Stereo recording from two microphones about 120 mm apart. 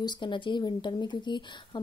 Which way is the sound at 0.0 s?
40° left (ahead or behind).